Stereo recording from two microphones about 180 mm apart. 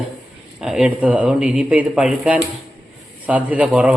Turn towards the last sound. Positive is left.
turn(degrees=-5)  # may be behind; listen again after turning